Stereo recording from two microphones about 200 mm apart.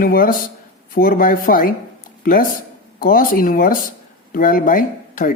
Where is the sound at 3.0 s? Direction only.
45° left (ahead or behind).